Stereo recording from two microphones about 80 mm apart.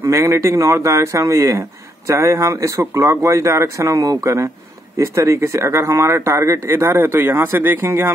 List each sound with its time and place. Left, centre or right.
0.0 s speech: right